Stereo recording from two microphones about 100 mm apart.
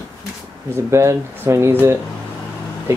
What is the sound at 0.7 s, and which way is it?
Speech, 25° right (ahead or behind).